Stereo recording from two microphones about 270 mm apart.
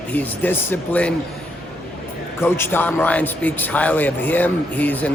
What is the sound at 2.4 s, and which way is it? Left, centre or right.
A man's voice, centre.